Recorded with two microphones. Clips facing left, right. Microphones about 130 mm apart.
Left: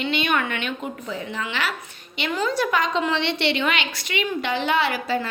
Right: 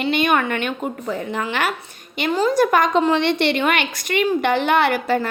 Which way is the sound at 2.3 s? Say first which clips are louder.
Right 6 dB; 35° right (ahead or behind).